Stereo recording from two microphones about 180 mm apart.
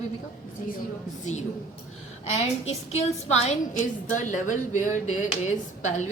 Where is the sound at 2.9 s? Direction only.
35° left (ahead or behind).